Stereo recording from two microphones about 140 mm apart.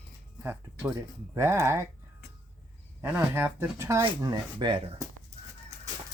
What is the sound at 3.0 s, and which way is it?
Speech, 15° right (ahead or behind).